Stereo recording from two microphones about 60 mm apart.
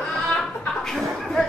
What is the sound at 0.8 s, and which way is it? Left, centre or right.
Chuckle, centre.